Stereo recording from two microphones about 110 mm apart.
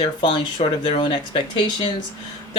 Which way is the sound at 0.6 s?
65° left (ahead or behind).